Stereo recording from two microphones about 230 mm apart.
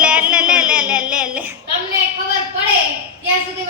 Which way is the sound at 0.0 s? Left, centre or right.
Centre.